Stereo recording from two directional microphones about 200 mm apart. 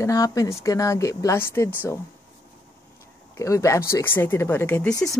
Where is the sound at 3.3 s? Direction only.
15° left (ahead or behind).